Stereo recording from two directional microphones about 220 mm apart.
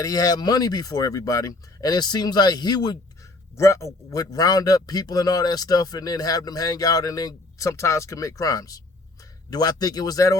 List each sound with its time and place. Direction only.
0.0 s a man's voice: 15° left (ahead or behind)